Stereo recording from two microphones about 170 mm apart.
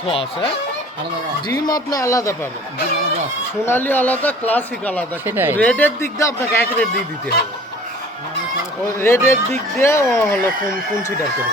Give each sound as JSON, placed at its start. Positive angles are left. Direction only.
{"t": 0.1, "sound": "speech", "side_deg": 30}
{"t": 3.6, "sound": "speech", "side_deg": 15}
{"t": 5.2, "sound": "speech", "side_deg": -10}
{"t": 5.5, "sound": "speech", "side_deg": 10}
{"t": 9.0, "sound": "speech", "side_deg": 15}